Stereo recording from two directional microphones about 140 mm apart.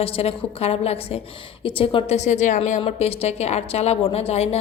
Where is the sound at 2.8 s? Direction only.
45° left (ahead or behind).